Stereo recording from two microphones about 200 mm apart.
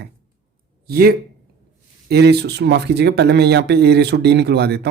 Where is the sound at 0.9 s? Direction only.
50° right (ahead or behind).